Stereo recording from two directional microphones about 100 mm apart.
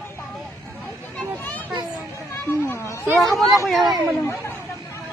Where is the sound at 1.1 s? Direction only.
15° left (ahead or behind).